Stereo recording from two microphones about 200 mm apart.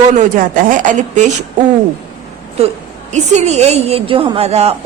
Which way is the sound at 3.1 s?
35° right (ahead or behind).